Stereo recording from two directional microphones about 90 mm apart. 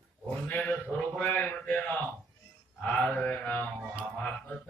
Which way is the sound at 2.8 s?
10° left (ahead or behind).